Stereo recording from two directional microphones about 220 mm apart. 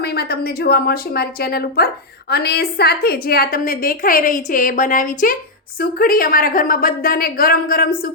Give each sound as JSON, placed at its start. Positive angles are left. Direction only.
{"t": 0.0, "sound": "a woman's voice", "side_deg": 45}